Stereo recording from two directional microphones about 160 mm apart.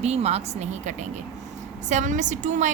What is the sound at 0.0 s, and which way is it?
A woman's voice, 40° right (ahead or behind).